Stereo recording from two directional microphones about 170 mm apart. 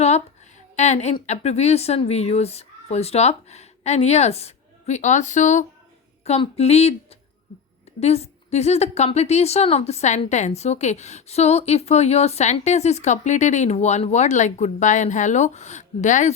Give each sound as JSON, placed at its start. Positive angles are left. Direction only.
{"t": 0.8, "sound": "a woman's voice", "side_deg": 40}
{"t": 7.9, "sound": "a woman's voice", "side_deg": 40}